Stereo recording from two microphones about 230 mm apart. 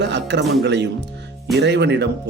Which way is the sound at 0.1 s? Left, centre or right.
Right.